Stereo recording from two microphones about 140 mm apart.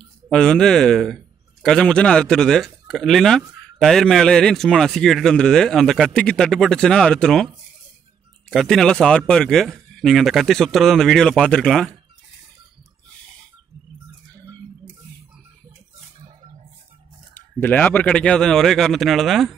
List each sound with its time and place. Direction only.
0.3 s a man's voice: 5° left (ahead or behind)
8.5 s a man's voice: centre (ahead or behind)
16.3 s a sound: 45° right (ahead or behind)
17.3 s a man's voice: 15° left (ahead or behind)